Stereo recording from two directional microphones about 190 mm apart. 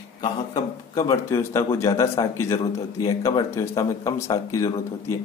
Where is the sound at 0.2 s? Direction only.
20° left (ahead or behind).